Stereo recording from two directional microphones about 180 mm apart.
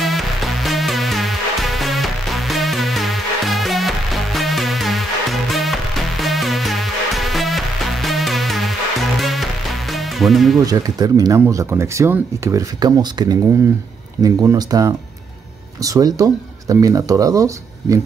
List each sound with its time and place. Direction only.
0.0 s music: centre (ahead or behind)
10.6 s speech: 20° right (ahead or behind)